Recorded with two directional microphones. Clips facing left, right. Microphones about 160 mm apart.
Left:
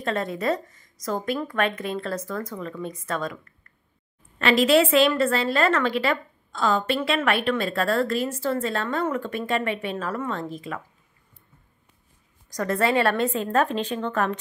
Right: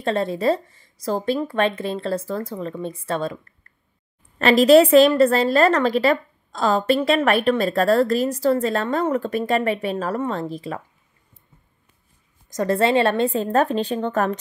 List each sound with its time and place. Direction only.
0.0 s speech: 30° right (ahead or behind)
4.4 s a woman's voice: 40° right (ahead or behind)
12.4 s a woman's voice: 25° right (ahead or behind)